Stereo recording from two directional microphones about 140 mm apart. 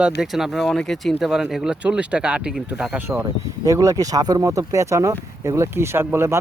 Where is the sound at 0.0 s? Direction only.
5° right (ahead or behind).